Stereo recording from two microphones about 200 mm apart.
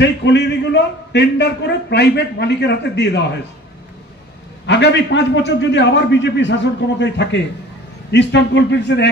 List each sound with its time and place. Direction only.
0.0 s a man's voice: 60° left (ahead or behind)
4.6 s a man's voice: 60° left (ahead or behind)